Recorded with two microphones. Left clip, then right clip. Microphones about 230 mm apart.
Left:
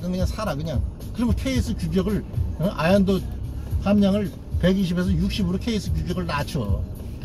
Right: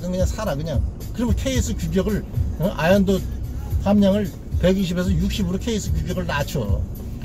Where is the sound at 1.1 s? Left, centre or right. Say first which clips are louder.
Right 2 dB; centre.